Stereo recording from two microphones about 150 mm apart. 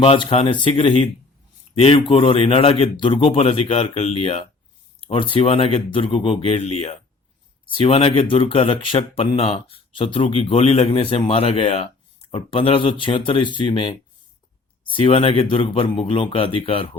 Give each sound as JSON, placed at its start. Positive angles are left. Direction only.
{"t": 0.0, "sound": "speech", "side_deg": 40}